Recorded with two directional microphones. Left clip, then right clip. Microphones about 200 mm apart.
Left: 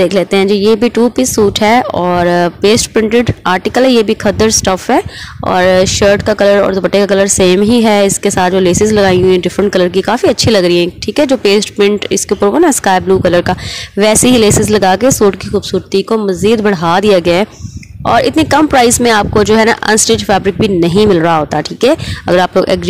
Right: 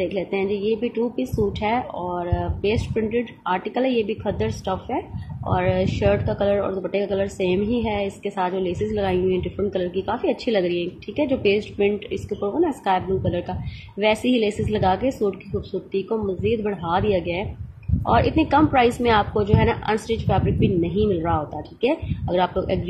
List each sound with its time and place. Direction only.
0.0 s speech: 55° left (ahead or behind)